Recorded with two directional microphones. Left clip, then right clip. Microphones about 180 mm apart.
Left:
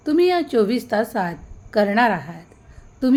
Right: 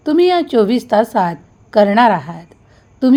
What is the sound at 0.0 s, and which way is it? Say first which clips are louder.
A woman's voice: right 5 dB; 20° right (ahead or behind).